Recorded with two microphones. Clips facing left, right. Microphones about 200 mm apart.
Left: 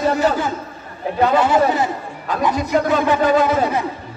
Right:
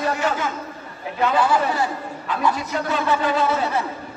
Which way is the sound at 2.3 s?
40° left (ahead or behind).